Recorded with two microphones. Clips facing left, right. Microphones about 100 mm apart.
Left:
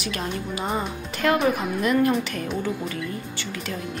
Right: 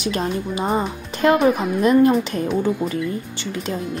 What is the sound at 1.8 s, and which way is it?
Speech, 25° right (ahead or behind).